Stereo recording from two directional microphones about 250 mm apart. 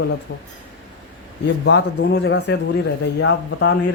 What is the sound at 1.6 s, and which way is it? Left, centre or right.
Speech, left.